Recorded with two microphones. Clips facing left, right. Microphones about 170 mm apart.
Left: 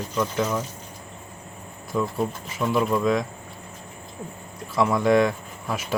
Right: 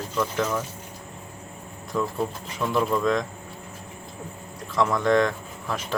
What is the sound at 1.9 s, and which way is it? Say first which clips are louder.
Speech: left 1 dB; 5° left (ahead or behind).